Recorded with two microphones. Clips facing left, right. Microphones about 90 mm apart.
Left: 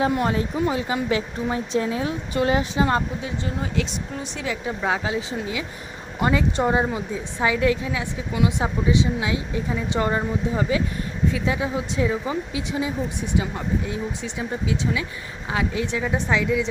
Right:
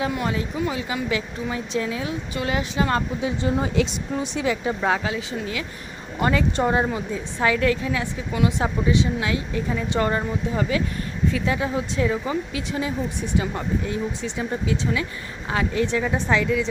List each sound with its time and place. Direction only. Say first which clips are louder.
0.0 s speech: left 3 dB; 40° left (ahead or behind)
3.2 s speech: right 5 dB; 15° right (ahead or behind)
3.8 s a woman's voice: right 4 dB; 5° right (ahead or behind)
6.1 s a woman's voice: even; 15° left (ahead or behind)